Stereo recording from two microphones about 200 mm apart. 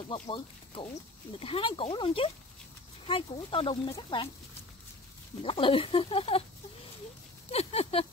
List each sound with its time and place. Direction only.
0.1 s speech: 25° left (ahead or behind)
5.4 s speech: 25° left (ahead or behind)
7.5 s speech: 30° left (ahead or behind)